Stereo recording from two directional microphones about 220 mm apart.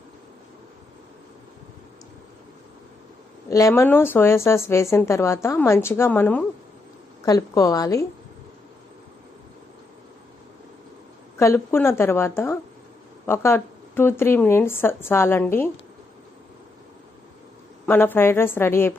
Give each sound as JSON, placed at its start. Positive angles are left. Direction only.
{"t": 3.5, "sound": "speech", "side_deg": 15}
{"t": 11.3, "sound": "speech", "side_deg": 10}
{"t": 17.8, "sound": "speech", "side_deg": 10}